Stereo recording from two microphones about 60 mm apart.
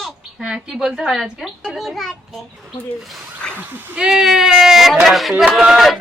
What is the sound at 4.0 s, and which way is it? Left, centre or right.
A woman's voice, centre.